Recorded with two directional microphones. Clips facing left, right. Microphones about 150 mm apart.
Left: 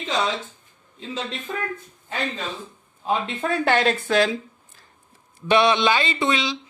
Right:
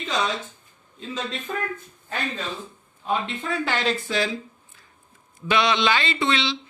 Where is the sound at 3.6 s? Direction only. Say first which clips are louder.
Left 5 dB; 55° left (ahead or behind).